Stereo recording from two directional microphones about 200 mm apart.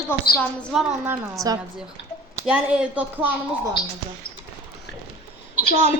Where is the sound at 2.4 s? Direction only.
5° right (ahead or behind).